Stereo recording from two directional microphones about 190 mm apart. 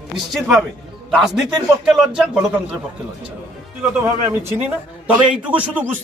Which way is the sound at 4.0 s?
10° right (ahead or behind).